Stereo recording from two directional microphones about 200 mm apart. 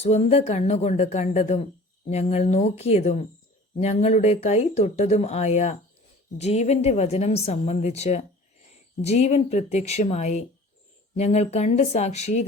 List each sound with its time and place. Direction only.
0.0 s speech: 30° left (ahead or behind)